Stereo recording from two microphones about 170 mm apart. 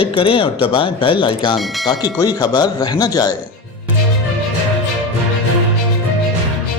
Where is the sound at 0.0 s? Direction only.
30° left (ahead or behind).